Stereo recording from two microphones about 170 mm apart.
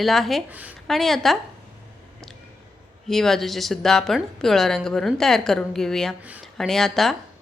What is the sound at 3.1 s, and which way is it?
Speech, centre (ahead or behind).